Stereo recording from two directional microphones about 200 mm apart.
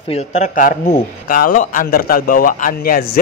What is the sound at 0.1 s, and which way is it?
Speech, 35° left (ahead or behind).